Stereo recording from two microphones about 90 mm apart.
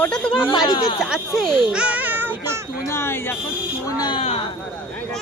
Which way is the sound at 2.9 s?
30° left (ahead or behind).